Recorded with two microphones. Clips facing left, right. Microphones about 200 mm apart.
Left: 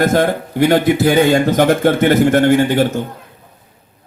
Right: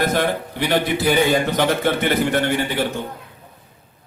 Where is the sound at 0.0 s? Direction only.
45° left (ahead or behind).